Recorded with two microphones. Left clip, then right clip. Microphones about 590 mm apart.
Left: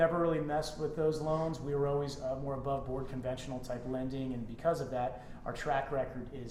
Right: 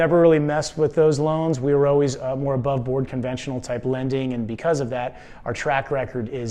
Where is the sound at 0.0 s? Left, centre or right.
Right.